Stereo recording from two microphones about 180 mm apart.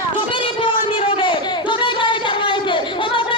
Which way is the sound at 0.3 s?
30° left (ahead or behind).